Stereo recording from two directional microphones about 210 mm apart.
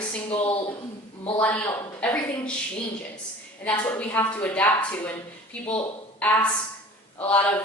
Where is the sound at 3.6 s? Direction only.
5° left (ahead or behind).